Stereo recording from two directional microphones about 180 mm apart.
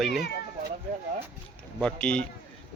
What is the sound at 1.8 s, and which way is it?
Speech, 5° left (ahead or behind).